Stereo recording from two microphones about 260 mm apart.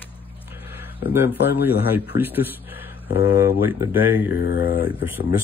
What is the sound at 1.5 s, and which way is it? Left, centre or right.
Speech, centre.